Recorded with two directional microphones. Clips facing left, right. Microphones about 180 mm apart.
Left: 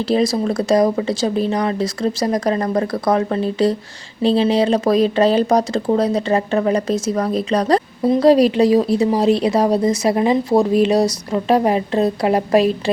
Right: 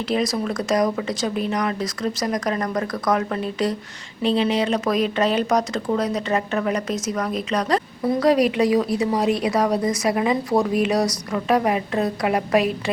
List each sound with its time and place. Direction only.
0.0 s speech: 30° left (ahead or behind)